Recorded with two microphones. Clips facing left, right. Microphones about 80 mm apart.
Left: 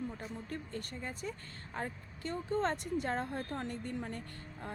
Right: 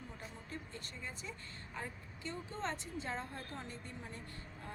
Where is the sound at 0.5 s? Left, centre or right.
Left.